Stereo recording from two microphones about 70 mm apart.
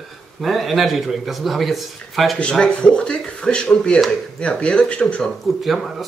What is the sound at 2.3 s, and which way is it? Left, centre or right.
Speech, centre.